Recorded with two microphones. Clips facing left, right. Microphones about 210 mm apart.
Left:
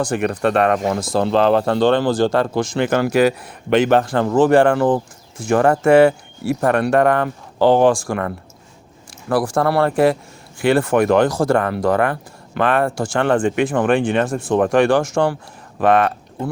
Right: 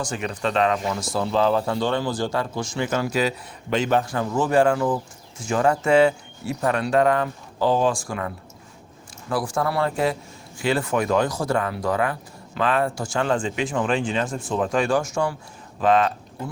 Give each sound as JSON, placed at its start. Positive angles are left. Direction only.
{"t": 0.0, "sound": "speech", "side_deg": 55}
{"t": 1.1, "sound": "speech", "side_deg": 70}
{"t": 5.4, "sound": "speech", "side_deg": 60}
{"t": 9.3, "sound": "speech", "side_deg": 75}
{"t": 11.5, "sound": "speech", "side_deg": 60}
{"t": 15.8, "sound": "speech", "side_deg": 60}